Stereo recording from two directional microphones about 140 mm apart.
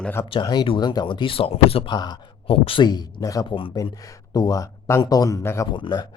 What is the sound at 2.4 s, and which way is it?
Speech, 40° left (ahead or behind).